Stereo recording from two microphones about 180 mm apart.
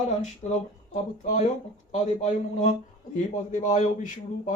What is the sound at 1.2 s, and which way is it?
Speech, 45° left (ahead or behind).